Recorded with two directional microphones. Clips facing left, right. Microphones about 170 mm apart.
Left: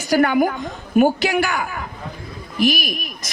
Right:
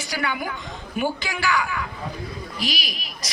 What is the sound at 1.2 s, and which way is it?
A woman's voice, 65° left (ahead or behind).